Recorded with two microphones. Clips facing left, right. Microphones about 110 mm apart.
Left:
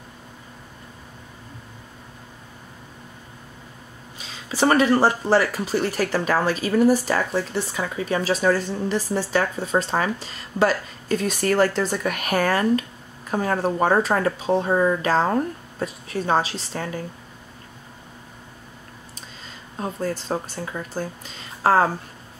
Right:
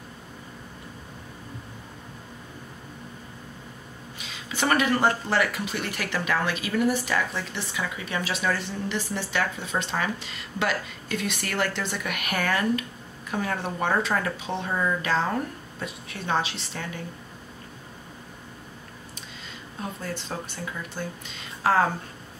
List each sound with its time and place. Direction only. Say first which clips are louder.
4.2 s speech: left 7 dB; 35° left (ahead or behind)
19.8 s speech: left 7 dB; 40° left (ahead or behind)